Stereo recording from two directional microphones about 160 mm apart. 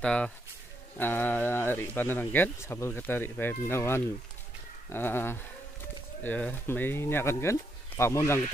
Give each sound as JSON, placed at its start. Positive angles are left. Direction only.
{"t": 0.0, "sound": "speech", "side_deg": 5}